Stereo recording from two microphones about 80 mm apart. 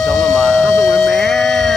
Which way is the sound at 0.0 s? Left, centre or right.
Centre.